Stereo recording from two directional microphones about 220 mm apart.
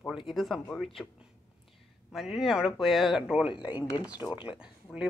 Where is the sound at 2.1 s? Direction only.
Centre (ahead or behind).